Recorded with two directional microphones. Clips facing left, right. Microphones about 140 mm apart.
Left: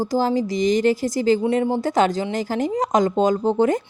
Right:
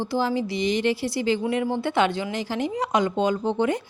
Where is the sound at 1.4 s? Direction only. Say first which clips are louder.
Left 4 dB; 30° left (ahead or behind).